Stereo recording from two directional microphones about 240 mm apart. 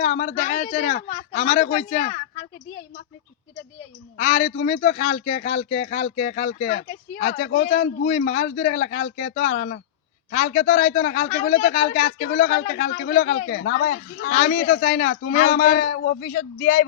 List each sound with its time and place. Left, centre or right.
0.0 s a man's voice: left
4.2 s a man's voice: left
15.8 s a man's voice: left